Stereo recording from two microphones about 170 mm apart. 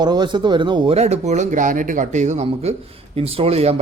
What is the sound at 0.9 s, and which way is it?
A man's voice, 40° right (ahead or behind).